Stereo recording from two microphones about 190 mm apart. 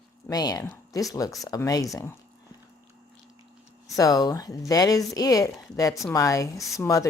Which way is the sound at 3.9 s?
20° left (ahead or behind).